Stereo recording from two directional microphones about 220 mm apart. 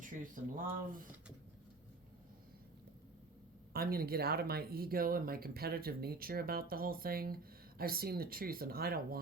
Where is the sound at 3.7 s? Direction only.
45° right (ahead or behind).